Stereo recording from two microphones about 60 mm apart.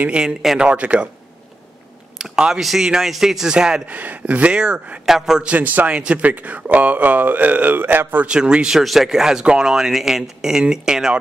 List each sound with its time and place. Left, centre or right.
0.0 s speech: centre
0.6 s speech: right
2.1 s speech: centre
3.9 s speech: right
5.0 s speech: centre
5.4 s speech: right
8.3 s speech: centre
8.7 s speech: centre